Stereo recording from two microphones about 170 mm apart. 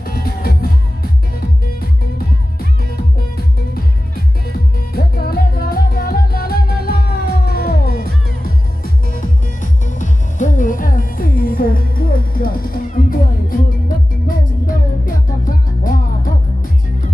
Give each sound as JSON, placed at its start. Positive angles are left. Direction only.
{"t": 0.0, "sound": "music", "side_deg": 65}
{"t": 3.3, "sound": "music", "side_deg": 65}